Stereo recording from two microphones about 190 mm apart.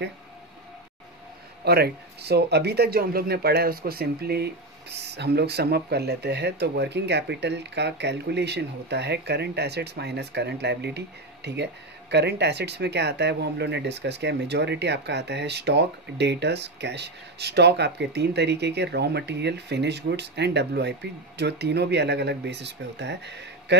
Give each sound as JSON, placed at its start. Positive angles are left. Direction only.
{"t": 1.6, "sound": "speech", "side_deg": -55}